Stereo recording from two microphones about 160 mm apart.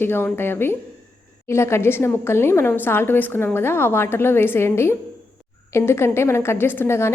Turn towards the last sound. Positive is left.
turn(degrees=15)  # may be behind; listen again after turning